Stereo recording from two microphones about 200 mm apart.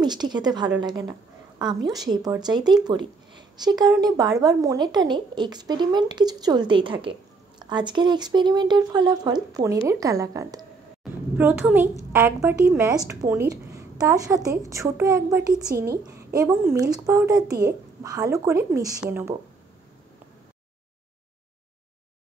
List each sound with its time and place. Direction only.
0.0 s a woman's voice: 20° right (ahead or behind)